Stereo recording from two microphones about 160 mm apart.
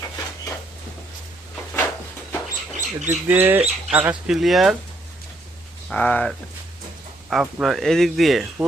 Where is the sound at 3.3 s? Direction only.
10° right (ahead or behind).